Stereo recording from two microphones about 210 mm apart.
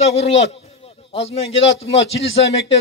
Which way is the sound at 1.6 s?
30° left (ahead or behind).